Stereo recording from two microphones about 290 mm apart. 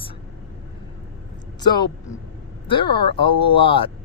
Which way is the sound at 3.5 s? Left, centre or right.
Centre.